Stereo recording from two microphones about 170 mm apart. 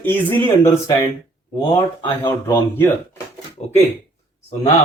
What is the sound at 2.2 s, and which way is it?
Speech, 10° left (ahead or behind).